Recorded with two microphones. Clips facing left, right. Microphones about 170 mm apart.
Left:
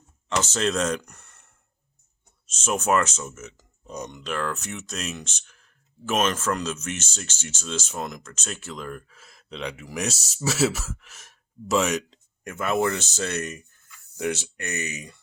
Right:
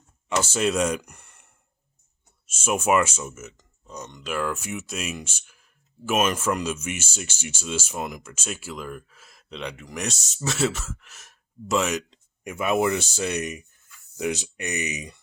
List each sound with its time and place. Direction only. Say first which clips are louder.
0.3 s speech: right 1 dB; 10° right (ahead or behind)
2.5 s speech: right 1 dB; 10° right (ahead or behind)
3.6 s burping: left 4 dB; 15° left (ahead or behind)
4.2 s speech: right 3 dB; 5° right (ahead or behind)
12.5 s speech: right 1 dB; 15° right (ahead or behind)